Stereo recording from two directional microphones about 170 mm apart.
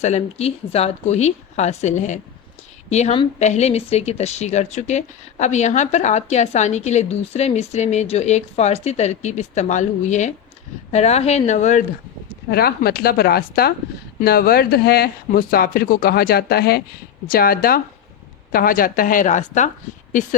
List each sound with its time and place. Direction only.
0.0 s speech: 40° left (ahead or behind)
12.5 s a woman's voice: 65° left (ahead or behind); by 19.7 s 45° left (ahead or behind)